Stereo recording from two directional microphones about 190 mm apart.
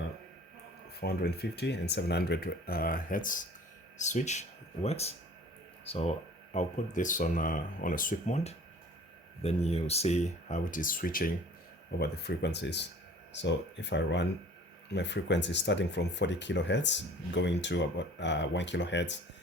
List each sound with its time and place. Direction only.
1.0 s speech: 55° left (ahead or behind)